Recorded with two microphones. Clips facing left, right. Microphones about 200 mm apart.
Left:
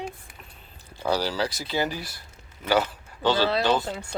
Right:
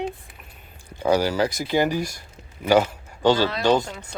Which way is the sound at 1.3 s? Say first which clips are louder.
Right 5 dB; 50° right (ahead or behind).